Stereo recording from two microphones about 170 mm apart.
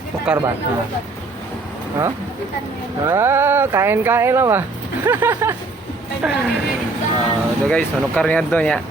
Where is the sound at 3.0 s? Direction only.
15° right (ahead or behind).